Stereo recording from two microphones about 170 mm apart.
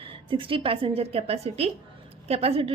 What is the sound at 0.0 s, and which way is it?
A woman's voice, 30° right (ahead or behind).